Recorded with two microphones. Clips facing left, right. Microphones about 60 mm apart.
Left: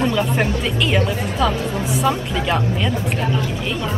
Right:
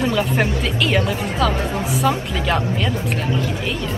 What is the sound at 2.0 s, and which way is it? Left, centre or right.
Speech, centre.